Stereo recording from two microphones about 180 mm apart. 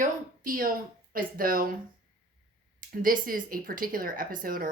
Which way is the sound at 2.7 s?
50° right (ahead or behind).